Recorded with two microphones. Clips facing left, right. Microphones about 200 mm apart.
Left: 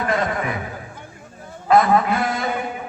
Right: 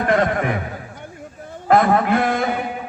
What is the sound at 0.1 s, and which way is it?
Speech, 55° right (ahead or behind).